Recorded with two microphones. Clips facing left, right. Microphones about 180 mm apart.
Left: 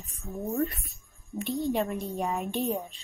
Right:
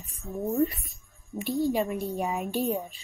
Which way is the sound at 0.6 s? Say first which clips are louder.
Right 4 dB; centre (ahead or behind).